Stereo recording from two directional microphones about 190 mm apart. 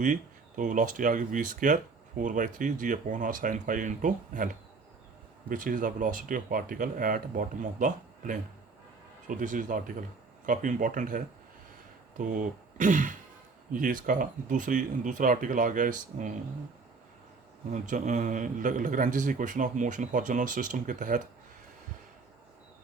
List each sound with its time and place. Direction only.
0.0 s a man's voice: 40° right (ahead or behind)
5.5 s a man's voice: 45° right (ahead or behind)
17.7 s a man's voice: 40° right (ahead or behind)